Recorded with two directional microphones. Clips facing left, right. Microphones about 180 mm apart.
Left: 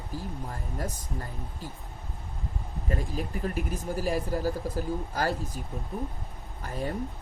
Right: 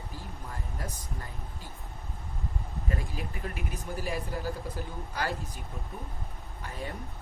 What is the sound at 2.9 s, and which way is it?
Speech, 40° left (ahead or behind).